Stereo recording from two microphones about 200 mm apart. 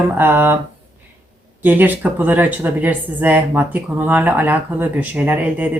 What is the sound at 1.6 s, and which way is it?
Speech, 10° right (ahead or behind).